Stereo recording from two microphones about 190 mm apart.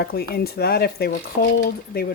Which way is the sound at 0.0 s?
55° left (ahead or behind).